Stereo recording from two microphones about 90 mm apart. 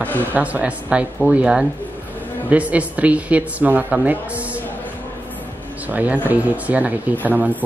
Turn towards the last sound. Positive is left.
turn(degrees=-20)  # may be behind; listen again after turning